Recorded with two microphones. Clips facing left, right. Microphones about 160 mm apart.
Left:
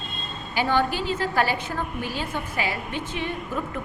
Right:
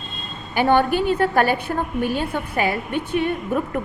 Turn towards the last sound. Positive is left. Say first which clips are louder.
# right 7 dB
turn(degrees=-55)  # may be behind; listen again after turning